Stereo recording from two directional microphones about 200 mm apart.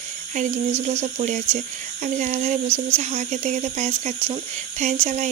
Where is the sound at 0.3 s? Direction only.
35° right (ahead or behind).